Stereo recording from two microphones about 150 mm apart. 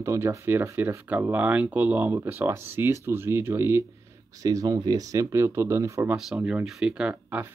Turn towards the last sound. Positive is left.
turn(degrees=-10)  # may be behind; listen again after turning